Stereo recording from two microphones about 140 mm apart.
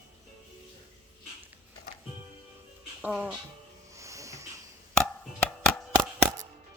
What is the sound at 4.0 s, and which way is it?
Music, 20° right (ahead or behind).